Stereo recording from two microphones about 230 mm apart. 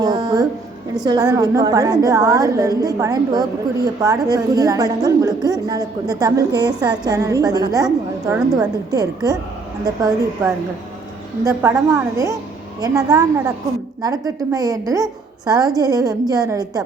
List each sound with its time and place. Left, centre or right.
0.0 s music: centre
0.9 s a woman's voice: centre